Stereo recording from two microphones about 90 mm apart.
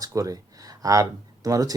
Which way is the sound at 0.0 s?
40° right (ahead or behind).